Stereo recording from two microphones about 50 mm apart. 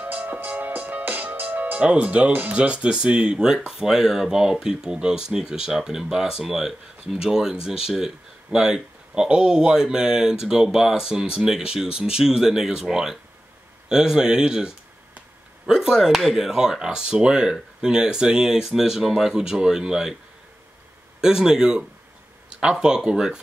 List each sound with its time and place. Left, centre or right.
0.0 s music: right
2.5 s speech: right
21.2 s speech: centre